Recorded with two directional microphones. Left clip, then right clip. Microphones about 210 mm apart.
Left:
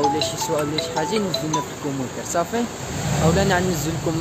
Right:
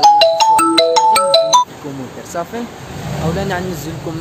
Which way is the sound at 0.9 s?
55° right (ahead or behind).